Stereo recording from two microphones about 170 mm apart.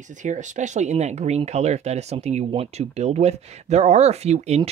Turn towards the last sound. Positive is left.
turn(degrees=-40)  # may be behind; listen again after turning